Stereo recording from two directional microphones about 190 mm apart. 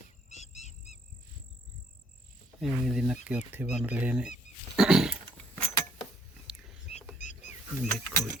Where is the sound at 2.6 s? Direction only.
Centre (ahead or behind).